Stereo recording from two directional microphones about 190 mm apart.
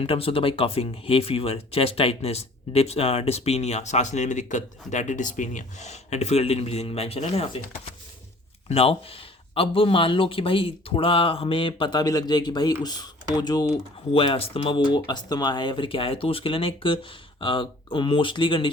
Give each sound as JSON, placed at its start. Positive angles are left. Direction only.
{"t": 0.0, "sound": "speech", "side_deg": 30}